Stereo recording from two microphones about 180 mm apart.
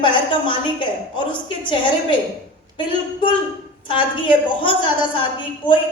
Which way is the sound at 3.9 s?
25° left (ahead or behind).